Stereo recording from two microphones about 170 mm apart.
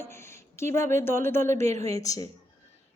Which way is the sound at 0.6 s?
15° left (ahead or behind).